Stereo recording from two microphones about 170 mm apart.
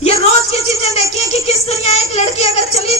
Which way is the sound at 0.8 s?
35° left (ahead or behind).